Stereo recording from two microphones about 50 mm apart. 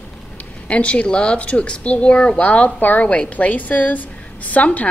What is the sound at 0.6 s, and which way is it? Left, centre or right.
A woman's voice, left.